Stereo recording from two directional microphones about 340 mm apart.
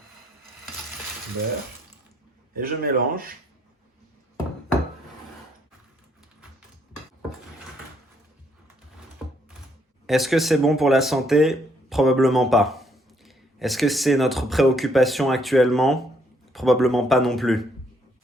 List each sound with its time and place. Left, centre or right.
2.6 s speech: right
10.1 s speech: centre